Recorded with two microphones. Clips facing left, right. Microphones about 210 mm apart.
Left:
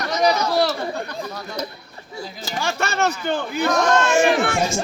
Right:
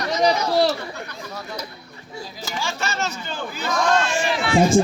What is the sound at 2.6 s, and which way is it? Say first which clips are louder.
Speech: left 5 dB; 60° left (ahead or behind).